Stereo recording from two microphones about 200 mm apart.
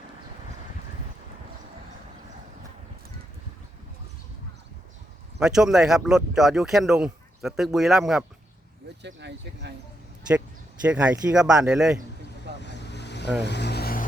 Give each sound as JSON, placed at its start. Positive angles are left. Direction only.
{"t": 5.4, "sound": "speech", "side_deg": -5}
{"t": 9.0, "sound": "speech", "side_deg": -60}
{"t": 10.8, "sound": "speech", "side_deg": -5}
{"t": 12.6, "sound": "vehicle", "side_deg": 60}